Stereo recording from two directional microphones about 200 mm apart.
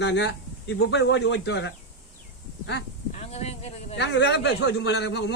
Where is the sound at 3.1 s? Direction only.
30° left (ahead or behind).